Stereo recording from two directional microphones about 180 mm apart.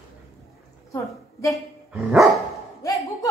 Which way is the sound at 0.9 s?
20° left (ahead or behind).